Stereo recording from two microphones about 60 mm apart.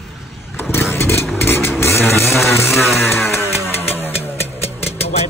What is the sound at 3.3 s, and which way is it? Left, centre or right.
Motorcycle, left.